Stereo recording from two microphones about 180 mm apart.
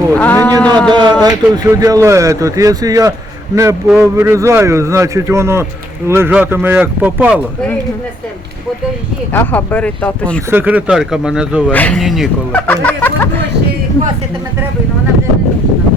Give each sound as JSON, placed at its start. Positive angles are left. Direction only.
{"t": 0.1, "sound": "speech", "side_deg": 10}
{"t": 0.9, "sound": "a man's voice", "side_deg": -25}
{"t": 9.3, "sound": "speech", "side_deg": 10}
{"t": 10.5, "sound": "speech", "side_deg": -10}
{"t": 11.7, "sound": "speech", "side_deg": 10}
{"t": 12.5, "sound": "speech", "side_deg": 10}